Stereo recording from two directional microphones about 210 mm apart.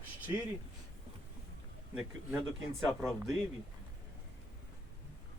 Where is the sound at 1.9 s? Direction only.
10° right (ahead or behind).